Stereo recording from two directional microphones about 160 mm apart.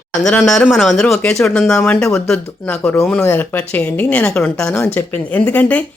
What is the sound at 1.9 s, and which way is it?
A woman's voice, 15° left (ahead or behind).